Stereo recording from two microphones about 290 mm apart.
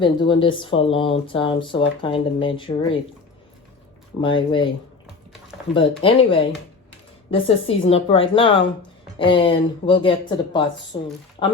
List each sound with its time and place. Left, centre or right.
0.0 s speech: centre
4.2 s speech: centre
5.7 s speech: centre